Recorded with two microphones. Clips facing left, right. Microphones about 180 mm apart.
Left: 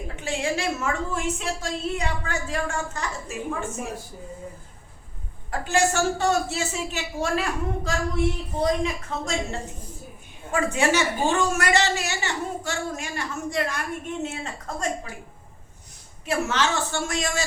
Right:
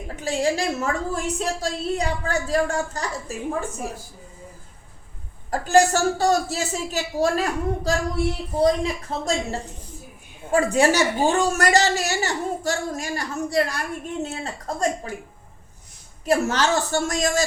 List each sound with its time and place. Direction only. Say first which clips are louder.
0.2 s speech: right 4 dB; 35° right (ahead or behind)
5.5 s speech: right 6 dB; 40° right (ahead or behind)
16.2 s speech: right 4 dB; 40° right (ahead or behind)